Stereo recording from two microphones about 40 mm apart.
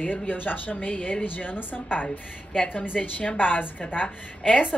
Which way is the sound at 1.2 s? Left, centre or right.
Left.